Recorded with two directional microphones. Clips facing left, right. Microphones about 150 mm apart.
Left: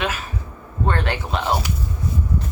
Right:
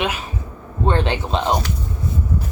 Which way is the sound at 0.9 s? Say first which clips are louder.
Right 4 dB; 20° right (ahead or behind).